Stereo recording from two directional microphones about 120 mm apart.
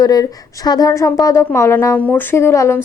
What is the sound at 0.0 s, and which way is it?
Speech, 35° left (ahead or behind).